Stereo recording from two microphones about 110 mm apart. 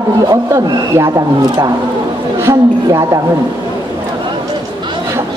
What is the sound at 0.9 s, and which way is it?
Speech, 30° right (ahead or behind).